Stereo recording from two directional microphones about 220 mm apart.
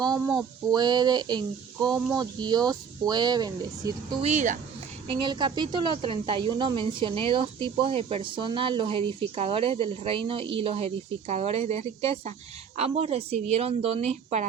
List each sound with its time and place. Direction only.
0.0 s speech: 15° right (ahead or behind)
4.3 s speech: 30° right (ahead or behind)
5.0 s speech: 20° right (ahead or behind)